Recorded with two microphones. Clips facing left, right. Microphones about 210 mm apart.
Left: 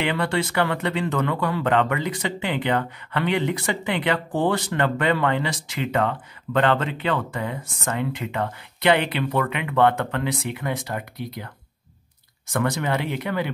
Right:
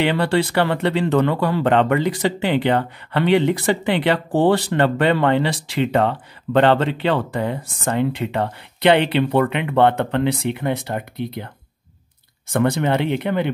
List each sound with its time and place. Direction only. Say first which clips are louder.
0.0 s speech: right 5 dB; 35° right (ahead or behind)
12.5 s speech: right 5 dB; 30° right (ahead or behind)